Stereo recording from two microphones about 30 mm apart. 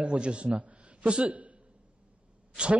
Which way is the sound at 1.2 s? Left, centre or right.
Right.